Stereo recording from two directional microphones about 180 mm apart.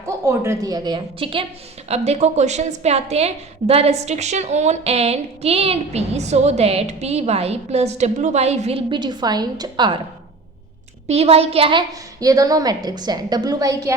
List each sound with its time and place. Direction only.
0.3 s a woman's voice: 15° right (ahead or behind)
11.1 s a woman's voice: 35° right (ahead or behind); by 13.9 s 20° right (ahead or behind)